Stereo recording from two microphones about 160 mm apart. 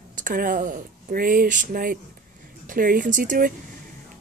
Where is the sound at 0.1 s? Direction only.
60° right (ahead or behind).